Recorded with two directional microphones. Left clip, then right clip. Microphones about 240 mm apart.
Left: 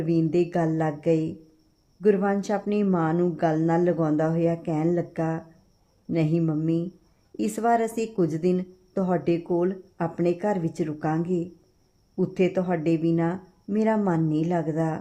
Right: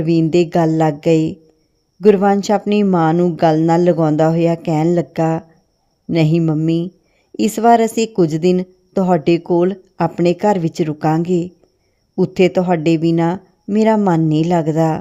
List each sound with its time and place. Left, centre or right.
0.0 s a woman's voice: right